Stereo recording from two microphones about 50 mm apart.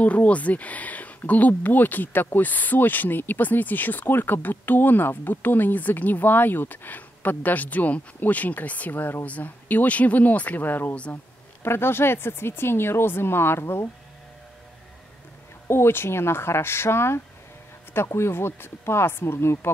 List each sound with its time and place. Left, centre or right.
0.0 s speech: left
11.6 s speech: left
15.7 s speech: left